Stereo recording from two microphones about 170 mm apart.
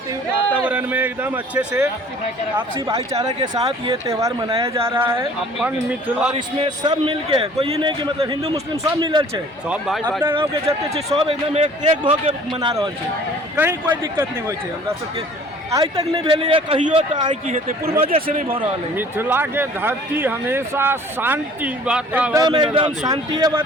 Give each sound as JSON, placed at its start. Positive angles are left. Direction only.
{"t": 0.5, "sound": "a man's voice", "side_deg": -10}
{"t": 3.1, "sound": "a man's voice", "side_deg": -25}
{"t": 6.3, "sound": "a man's voice", "side_deg": -35}
{"t": 9.6, "sound": "speech", "side_deg": -5}
{"t": 10.2, "sound": "a man's voice", "side_deg": -30}
{"t": 12.5, "sound": "a man's voice", "side_deg": -25}
{"t": 13.6, "sound": "a man's voice", "side_deg": -10}
{"t": 17.4, "sound": "speech", "side_deg": -50}
{"t": 18.0, "sound": "speech", "side_deg": -35}
{"t": 18.9, "sound": "speech", "side_deg": -10}
{"t": 22.3, "sound": "a man's voice", "side_deg": -20}